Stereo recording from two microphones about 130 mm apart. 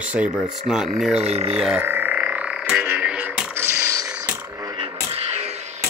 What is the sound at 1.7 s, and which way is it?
Frog, 15° right (ahead or behind).